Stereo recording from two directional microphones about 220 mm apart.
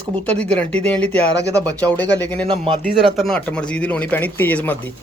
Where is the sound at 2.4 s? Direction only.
25° right (ahead or behind).